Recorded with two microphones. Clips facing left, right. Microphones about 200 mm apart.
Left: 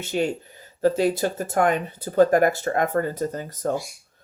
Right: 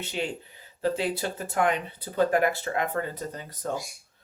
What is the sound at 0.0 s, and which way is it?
Speech, 45° left (ahead or behind).